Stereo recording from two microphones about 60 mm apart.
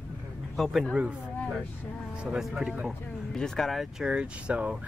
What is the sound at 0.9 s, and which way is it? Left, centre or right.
Speech, centre.